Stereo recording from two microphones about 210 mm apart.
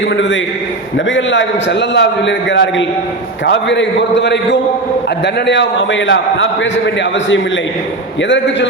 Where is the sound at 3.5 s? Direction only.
60° left (ahead or behind).